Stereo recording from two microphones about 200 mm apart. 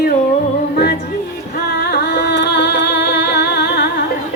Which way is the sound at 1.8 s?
55° left (ahead or behind).